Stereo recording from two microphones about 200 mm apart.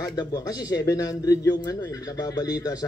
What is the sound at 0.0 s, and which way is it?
A man's voice, 20° left (ahead or behind).